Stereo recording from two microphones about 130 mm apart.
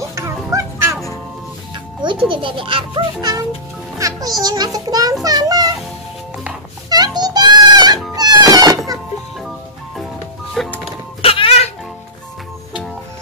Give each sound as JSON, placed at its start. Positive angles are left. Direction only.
{"t": 0.1, "sound": "music", "side_deg": -25}
{"t": 2.2, "sound": "a child's voice", "side_deg": -40}
{"t": 3.2, "sound": "a child's voice", "side_deg": -30}
{"t": 6.9, "sound": "music", "side_deg": -30}
{"t": 10.5, "sound": "music", "side_deg": 5}
{"t": 11.2, "sound": "music", "side_deg": 45}